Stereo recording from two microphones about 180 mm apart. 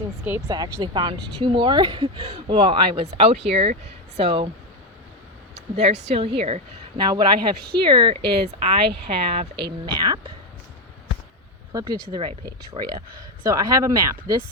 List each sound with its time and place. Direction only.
0.3 s a woman's voice: 15° right (ahead or behind)
5.7 s a woman's voice: 35° right (ahead or behind)
11.7 s speech: 20° right (ahead or behind)